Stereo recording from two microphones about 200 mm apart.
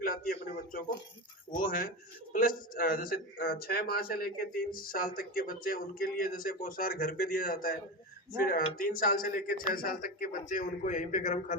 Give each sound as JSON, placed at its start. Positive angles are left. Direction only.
{"t": 0.0, "sound": "a sound", "side_deg": 45}
{"t": 1.5, "sound": "a man's voice", "side_deg": 40}
{"t": 8.8, "sound": "a man's voice", "side_deg": 45}